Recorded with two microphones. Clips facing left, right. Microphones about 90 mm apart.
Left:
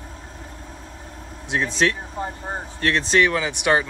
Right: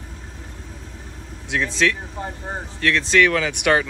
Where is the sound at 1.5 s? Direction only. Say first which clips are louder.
Even; 30° left (ahead or behind).